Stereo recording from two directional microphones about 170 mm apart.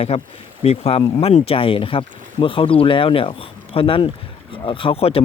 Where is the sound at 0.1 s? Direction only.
35° left (ahead or behind).